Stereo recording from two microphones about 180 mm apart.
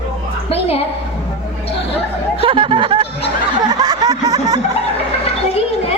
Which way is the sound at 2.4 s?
30° right (ahead or behind).